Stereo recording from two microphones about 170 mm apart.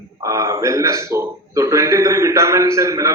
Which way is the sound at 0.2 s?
20° right (ahead or behind).